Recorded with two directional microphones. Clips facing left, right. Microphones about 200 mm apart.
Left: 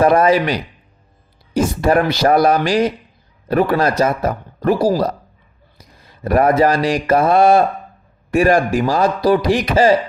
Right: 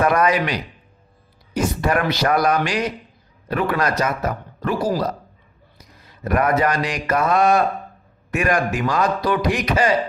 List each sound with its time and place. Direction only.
0.0 s a man's voice: 30° left (ahead or behind)
5.7 s mantra: 30° left (ahead or behind)
8.3 s a man's voice: 30° left (ahead or behind)